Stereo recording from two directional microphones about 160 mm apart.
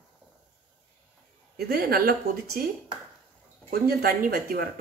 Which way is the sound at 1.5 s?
70° right (ahead or behind).